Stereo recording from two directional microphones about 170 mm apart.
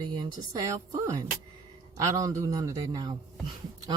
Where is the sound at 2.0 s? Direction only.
20° right (ahead or behind).